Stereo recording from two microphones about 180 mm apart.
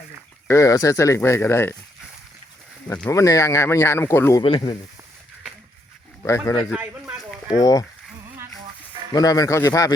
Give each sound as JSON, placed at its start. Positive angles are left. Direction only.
{"t": 0.4, "sound": "speech", "side_deg": 15}
{"t": 2.8, "sound": "speech", "side_deg": 10}
{"t": 4.4, "sound": "a man's voice", "side_deg": 25}
{"t": 6.2, "sound": "a man's voice", "side_deg": 15}
{"t": 9.1, "sound": "a man's voice", "side_deg": 20}